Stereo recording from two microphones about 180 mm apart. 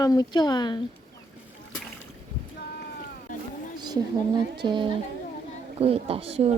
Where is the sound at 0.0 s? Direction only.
20° left (ahead or behind).